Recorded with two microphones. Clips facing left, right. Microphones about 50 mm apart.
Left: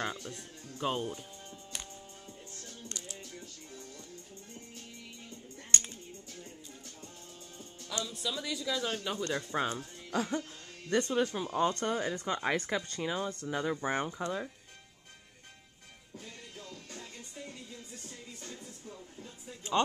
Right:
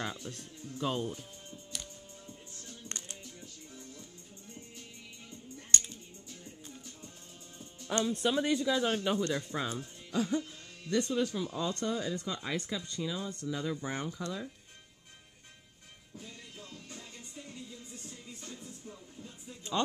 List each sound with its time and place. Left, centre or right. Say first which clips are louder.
0.3 s speech: right 1 dB; left
1.5 s music: even; left
2.9 s music: right 1 dB; right
7.9 s speech: right 7 dB; right
8.6 s speech: right 4 dB; right
9.5 s speech: left 3 dB; left
16.2 s music: left 1 dB; left